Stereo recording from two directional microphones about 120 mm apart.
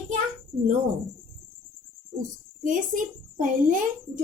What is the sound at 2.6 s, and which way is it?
A woman's voice, 90° right.